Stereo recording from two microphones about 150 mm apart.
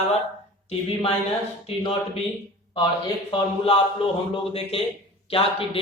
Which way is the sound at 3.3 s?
35° left (ahead or behind).